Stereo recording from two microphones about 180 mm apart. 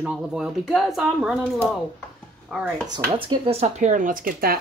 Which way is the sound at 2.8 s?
25° right (ahead or behind).